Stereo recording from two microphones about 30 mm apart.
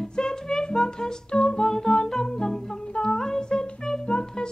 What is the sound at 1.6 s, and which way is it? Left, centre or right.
Music, centre.